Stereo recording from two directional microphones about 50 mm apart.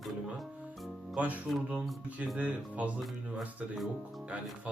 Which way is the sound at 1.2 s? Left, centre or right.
Right.